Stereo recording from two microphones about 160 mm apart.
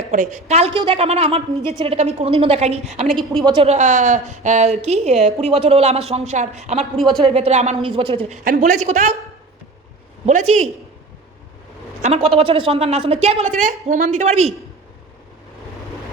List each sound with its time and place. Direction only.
0.1 s a woman's voice: 45° right (ahead or behind)
3.2 s a woman's voice: 30° right (ahead or behind)
6.9 s speech: centre (ahead or behind)
7.3 s speech: 40° right (ahead or behind)
7.8 s a woman's voice: 35° right (ahead or behind)
8.4 s speech: 50° right (ahead or behind)
10.2 s speech: 45° right (ahead or behind)
12.0 s a woman's voice: 40° right (ahead or behind)
13.7 s speech: 50° right (ahead or behind)